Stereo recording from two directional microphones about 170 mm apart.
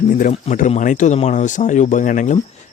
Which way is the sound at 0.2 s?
45° left (ahead or behind).